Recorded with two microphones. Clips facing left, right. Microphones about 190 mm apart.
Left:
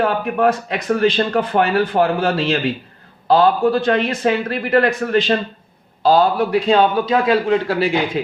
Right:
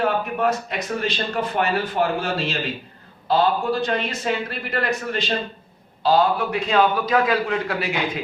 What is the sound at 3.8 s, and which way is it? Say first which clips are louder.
Speech: left 7 dB; 60° left (ahead or behind).